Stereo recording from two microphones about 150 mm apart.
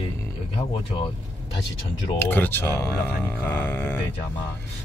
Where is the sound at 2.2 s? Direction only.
10° left (ahead or behind).